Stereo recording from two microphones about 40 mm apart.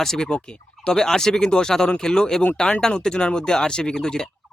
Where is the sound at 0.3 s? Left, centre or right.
Left.